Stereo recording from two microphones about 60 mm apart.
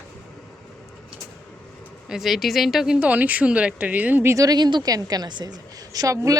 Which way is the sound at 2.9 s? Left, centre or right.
Right.